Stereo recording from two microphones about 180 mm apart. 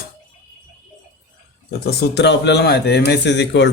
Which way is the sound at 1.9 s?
65° left (ahead or behind).